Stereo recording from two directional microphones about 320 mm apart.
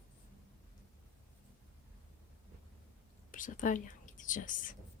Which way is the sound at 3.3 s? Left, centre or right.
Left.